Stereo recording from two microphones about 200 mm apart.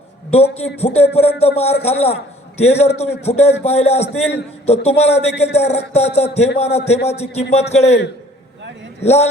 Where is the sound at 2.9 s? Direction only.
30° left (ahead or behind).